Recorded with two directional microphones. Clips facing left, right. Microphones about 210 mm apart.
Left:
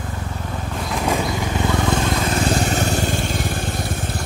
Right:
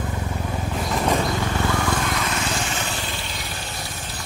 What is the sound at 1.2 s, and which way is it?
Vehicle, 15° left (ahead or behind).